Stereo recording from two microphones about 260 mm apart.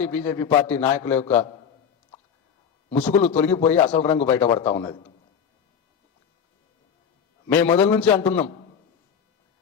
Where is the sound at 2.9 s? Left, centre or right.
Centre.